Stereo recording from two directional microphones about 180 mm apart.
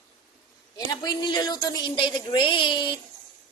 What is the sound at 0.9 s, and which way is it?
A woman's voice, 25° left (ahead or behind).